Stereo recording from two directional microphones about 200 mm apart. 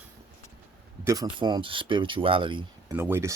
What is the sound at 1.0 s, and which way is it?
Speech, 20° right (ahead or behind).